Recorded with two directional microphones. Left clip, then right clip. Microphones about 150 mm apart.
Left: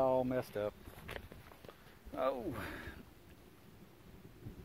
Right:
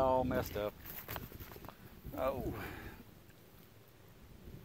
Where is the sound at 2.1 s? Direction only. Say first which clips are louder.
Left 1 dB; 25° left (ahead or behind).